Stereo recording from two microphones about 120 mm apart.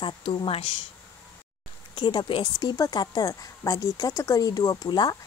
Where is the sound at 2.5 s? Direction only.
30° left (ahead or behind).